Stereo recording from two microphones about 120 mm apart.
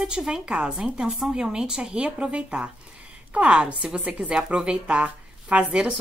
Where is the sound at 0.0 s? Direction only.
5° right (ahead or behind).